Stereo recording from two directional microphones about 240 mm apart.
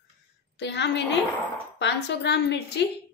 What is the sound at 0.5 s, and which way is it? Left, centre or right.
A woman's voice, left.